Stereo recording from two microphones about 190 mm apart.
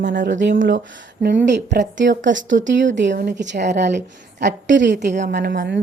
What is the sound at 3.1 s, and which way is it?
Speech, 45° right (ahead or behind).